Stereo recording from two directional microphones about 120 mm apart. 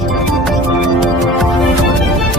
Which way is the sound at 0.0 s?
Centre (ahead or behind).